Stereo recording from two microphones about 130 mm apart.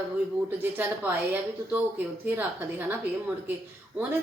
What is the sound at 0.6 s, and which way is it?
Speech, 15° right (ahead or behind).